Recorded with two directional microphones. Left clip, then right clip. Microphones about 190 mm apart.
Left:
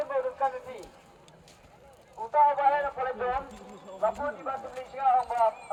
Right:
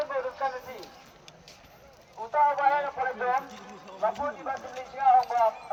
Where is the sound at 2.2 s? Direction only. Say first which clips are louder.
Left 1 dB; 25° left (ahead or behind).